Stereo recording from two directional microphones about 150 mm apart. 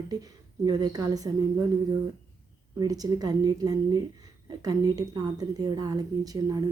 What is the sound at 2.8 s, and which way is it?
A woman's voice, 25° right (ahead or behind).